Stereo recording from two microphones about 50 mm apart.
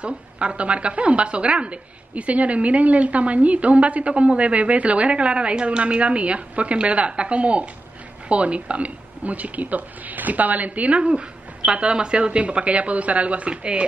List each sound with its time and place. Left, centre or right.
0.0 s a woman's voice: right